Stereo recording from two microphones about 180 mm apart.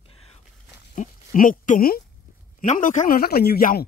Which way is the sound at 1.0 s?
45° left (ahead or behind).